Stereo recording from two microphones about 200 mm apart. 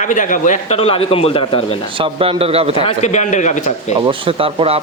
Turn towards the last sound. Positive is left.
turn(degrees=-30)  # may be behind; listen again after turning